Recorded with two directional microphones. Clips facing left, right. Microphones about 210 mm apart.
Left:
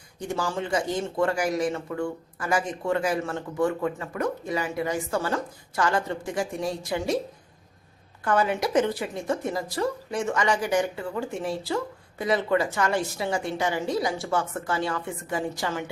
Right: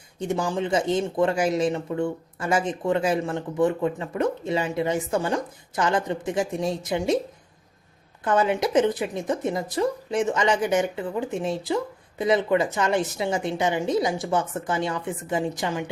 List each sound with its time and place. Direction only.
0.2 s speech: 20° right (ahead or behind)
8.2 s speech: 20° right (ahead or behind)